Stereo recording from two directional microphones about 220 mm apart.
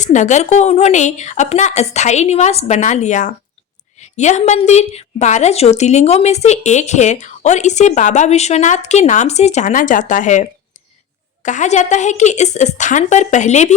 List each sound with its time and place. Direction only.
0.0 s a woman's voice: 35° left (ahead or behind)